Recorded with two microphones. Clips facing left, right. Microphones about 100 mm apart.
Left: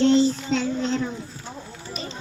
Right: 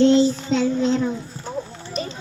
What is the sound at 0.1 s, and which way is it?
Child singing, 5° right (ahead or behind).